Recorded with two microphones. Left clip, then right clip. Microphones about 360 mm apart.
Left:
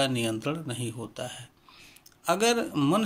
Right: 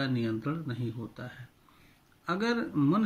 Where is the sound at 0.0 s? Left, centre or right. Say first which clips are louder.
Left 5 dB; centre.